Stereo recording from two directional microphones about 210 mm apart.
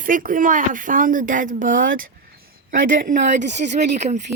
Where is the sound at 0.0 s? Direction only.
40° right (ahead or behind).